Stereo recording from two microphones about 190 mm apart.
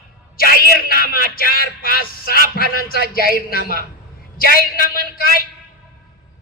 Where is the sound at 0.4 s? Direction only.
55° right (ahead or behind).